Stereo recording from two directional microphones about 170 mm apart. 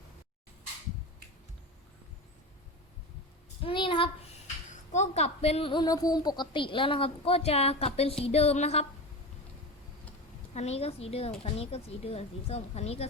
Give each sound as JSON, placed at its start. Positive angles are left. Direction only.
{"t": 3.6, "sound": "child singing", "side_deg": 30}
{"t": 4.7, "sound": "a woman's voice", "side_deg": 45}
{"t": 10.5, "sound": "a woman's voice", "side_deg": 40}